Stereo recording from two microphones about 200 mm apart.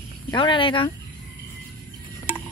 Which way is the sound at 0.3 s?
25° left (ahead or behind).